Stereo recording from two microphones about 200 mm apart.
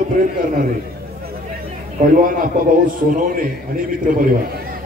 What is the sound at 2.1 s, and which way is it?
A man's voice, 45° right (ahead or behind).